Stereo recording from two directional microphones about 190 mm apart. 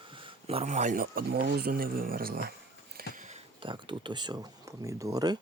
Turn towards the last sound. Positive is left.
turn(degrees=-20)  # may be behind; listen again after turning